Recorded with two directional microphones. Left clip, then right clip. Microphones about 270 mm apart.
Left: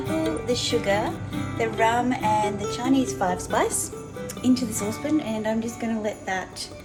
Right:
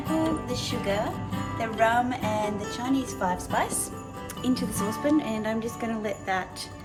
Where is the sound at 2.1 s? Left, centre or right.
Left.